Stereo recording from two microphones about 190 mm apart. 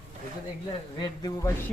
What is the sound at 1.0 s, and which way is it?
Speech, 20° left (ahead or behind).